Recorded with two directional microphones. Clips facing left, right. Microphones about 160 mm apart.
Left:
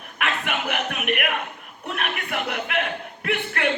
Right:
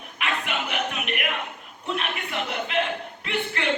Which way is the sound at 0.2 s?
55° left (ahead or behind).